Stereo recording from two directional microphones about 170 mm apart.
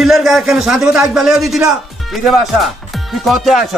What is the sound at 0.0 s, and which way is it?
A man's voice, centre (ahead or behind).